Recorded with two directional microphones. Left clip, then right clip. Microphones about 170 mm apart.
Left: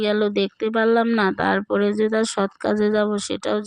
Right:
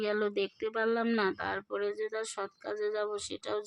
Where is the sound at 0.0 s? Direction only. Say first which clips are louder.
Left 11 dB; 30° left (ahead or behind).